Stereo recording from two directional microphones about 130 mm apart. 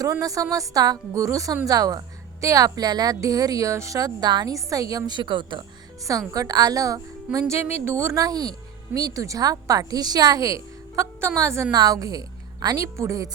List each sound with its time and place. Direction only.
0.0 s a woman's voice: 25° right (ahead or behind)
6.1 s a woman's voice: 25° right (ahead or behind)